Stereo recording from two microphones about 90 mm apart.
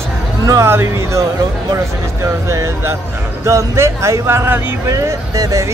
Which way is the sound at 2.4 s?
35° right (ahead or behind).